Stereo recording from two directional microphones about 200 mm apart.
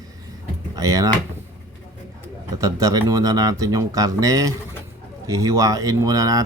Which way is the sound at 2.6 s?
15° right (ahead or behind).